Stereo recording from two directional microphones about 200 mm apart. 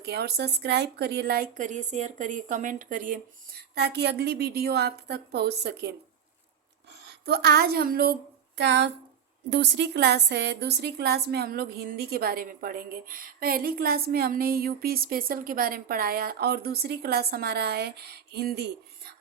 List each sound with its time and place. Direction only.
0.0 s a woman's voice: 55° right (ahead or behind)
7.3 s a woman's voice: 50° right (ahead or behind)
8.5 s a woman's voice: 60° right (ahead or behind)